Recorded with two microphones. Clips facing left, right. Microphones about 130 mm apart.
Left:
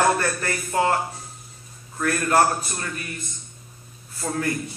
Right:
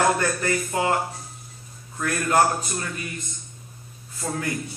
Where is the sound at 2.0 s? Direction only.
15° right (ahead or behind).